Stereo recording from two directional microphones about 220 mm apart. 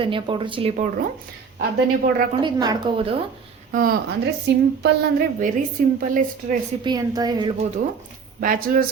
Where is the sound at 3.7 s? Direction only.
40° right (ahead or behind).